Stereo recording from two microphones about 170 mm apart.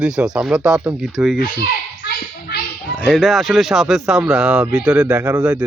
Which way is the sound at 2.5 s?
70° left (ahead or behind).